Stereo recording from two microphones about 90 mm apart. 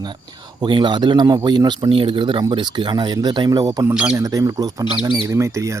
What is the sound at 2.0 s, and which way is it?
Speech, 65° right (ahead or behind).